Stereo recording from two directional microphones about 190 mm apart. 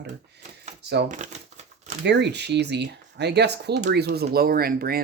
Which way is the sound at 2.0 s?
65° right (ahead or behind).